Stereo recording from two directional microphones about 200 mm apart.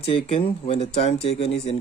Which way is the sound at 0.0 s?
30° left (ahead or behind).